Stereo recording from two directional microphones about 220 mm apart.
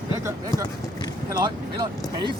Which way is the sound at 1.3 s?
20° right (ahead or behind).